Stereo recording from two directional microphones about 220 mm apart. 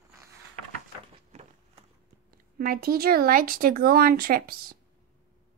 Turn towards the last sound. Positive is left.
turn(degrees=-40)  # may be behind; listen again after turning